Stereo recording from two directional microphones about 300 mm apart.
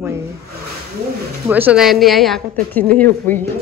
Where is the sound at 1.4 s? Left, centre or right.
Centre.